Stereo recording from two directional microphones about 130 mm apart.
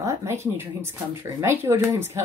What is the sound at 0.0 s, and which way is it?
Speech, 25° right (ahead or behind).